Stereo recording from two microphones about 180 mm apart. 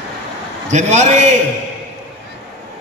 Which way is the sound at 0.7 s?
40° right (ahead or behind).